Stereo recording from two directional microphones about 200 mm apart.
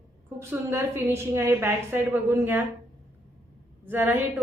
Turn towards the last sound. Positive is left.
turn(degrees=-10)  # may be behind; listen again after turning